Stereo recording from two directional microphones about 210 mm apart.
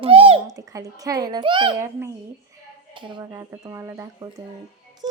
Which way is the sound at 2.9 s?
25° right (ahead or behind).